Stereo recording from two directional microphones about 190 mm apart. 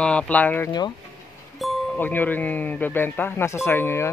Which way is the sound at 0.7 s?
20° left (ahead or behind).